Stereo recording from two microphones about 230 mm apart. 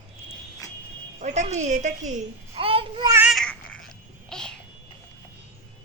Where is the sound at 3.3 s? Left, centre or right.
Centre.